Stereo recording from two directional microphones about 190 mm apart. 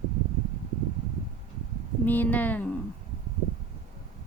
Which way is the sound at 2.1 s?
10° left (ahead or behind).